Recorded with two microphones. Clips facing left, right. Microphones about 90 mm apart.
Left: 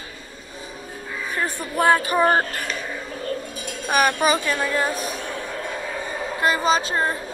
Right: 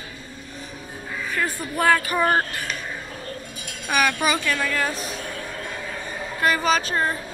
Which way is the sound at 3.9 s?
40° left (ahead or behind).